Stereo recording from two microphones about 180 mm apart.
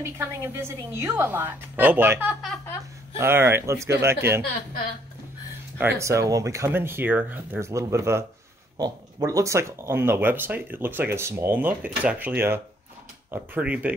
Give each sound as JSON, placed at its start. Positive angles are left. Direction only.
{"t": 0.0, "sound": "speech", "side_deg": -15}
{"t": 5.8, "sound": "speech", "side_deg": -15}